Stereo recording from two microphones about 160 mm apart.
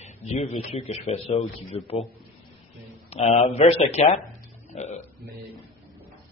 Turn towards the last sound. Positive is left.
turn(degrees=40)  # may be behind; listen again after turning